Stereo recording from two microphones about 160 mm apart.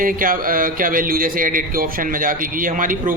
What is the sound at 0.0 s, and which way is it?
Speech, 60° right (ahead or behind).